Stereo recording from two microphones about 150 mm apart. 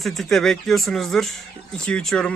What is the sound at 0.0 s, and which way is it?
Speech, centre (ahead or behind).